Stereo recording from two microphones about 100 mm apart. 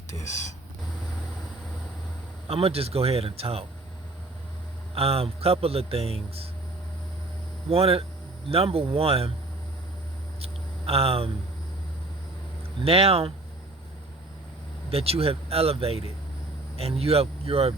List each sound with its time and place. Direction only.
0.1 s speech: 30° left (ahead or behind)
2.5 s speech: 80° right
4.9 s speech: 80° right
7.7 s speech: 80° right
10.4 s a sound: 85° right
12.8 s speech: 75° right (ahead or behind)
14.8 s speech: 80° right